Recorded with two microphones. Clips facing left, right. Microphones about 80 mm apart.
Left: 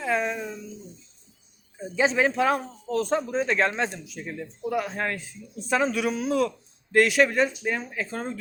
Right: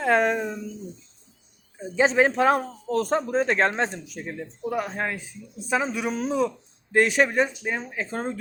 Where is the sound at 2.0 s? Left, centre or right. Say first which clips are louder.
Right 3 dB; right.